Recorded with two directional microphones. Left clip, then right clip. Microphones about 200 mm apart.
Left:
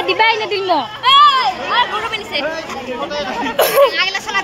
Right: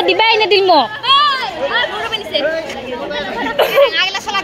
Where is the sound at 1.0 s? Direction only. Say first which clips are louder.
Left 3 dB; 45° left (ahead or behind).